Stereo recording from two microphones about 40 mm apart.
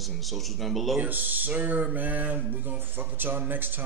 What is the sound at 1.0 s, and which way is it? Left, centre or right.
A man's voice, right.